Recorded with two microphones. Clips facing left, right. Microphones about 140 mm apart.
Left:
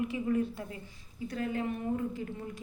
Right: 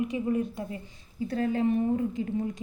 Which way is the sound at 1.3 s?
30° right (ahead or behind).